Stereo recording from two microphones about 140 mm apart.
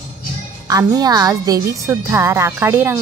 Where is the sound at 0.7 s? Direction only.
25° right (ahead or behind).